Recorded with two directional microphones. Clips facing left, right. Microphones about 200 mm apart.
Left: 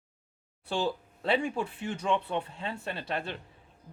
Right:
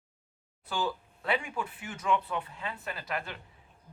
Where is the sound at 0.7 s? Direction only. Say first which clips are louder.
Left 3 dB; 30° left (ahead or behind).